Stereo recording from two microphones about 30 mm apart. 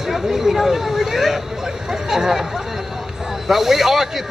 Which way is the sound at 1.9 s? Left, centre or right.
Centre.